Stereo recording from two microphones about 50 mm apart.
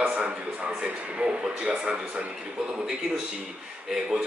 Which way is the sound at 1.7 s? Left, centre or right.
Right.